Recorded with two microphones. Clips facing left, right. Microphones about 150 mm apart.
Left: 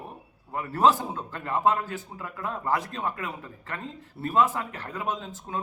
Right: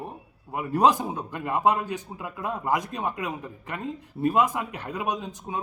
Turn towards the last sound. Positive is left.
turn(degrees=-15)  # may be behind; listen again after turning